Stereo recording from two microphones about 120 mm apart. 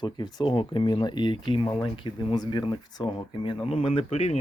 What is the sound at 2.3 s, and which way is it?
Speech, 35° left (ahead or behind).